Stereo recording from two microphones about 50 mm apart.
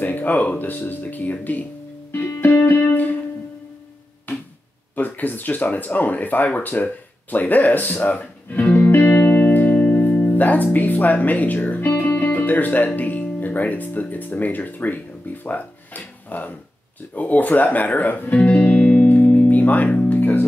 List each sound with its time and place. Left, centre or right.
0.0 s speech: left
2.2 s music: left
4.3 s a sound: left
4.9 s speech: left
8.6 s music: left
10.3 s speech: left
12.2 s guitar: left
13.4 s speech: left
18.6 s music: left
20.2 s music: left